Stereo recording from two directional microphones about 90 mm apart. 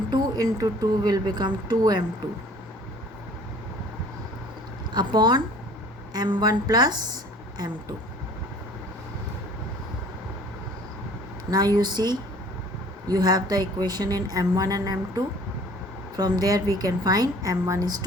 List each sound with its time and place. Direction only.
0.1 s a woman's voice: 45° right (ahead or behind)
4.9 s a woman's voice: 55° right (ahead or behind)
11.5 s a woman's voice: 50° right (ahead or behind)